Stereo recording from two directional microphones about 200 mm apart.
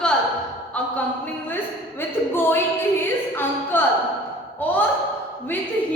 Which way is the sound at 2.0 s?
10° left (ahead or behind).